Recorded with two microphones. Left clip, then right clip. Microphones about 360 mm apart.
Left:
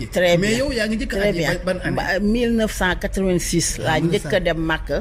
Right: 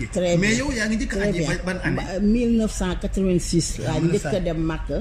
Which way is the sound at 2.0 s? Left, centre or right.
Left.